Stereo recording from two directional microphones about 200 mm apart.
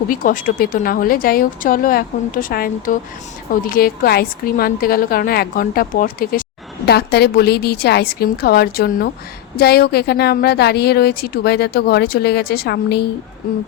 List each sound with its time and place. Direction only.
0.1 s a woman's voice: 45° left (ahead or behind)